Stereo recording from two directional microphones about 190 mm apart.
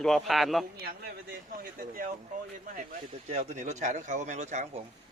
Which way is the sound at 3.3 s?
35° right (ahead or behind).